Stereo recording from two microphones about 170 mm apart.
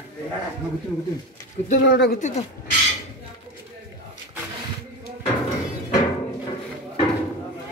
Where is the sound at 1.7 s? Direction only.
70° left (ahead or behind).